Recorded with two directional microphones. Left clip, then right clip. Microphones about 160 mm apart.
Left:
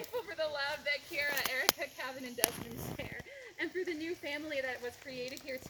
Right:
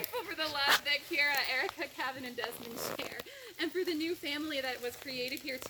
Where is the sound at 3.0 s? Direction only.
15° left (ahead or behind).